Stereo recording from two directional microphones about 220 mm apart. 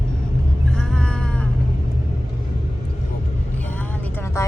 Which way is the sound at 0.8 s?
5° left (ahead or behind).